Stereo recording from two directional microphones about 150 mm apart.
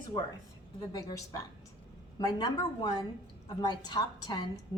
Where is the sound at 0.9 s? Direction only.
25° left (ahead or behind).